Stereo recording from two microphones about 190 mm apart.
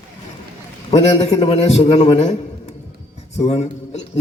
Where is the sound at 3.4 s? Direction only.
35° left (ahead or behind).